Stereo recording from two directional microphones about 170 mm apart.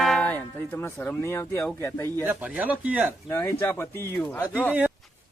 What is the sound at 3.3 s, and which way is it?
Speech, 15° left (ahead or behind).